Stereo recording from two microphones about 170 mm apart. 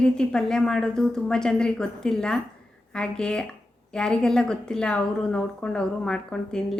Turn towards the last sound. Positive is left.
turn(degrees=5)  # may be behind; listen again after turning